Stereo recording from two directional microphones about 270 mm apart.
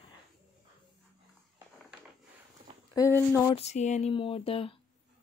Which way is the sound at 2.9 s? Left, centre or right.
Centre.